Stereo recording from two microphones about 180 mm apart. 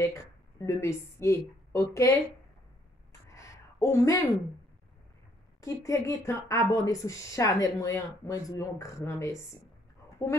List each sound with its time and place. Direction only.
0.0 s speech: 15° left (ahead or behind)
3.1 s a sound: 15° left (ahead or behind)
5.6 s speech: 20° left (ahead or behind)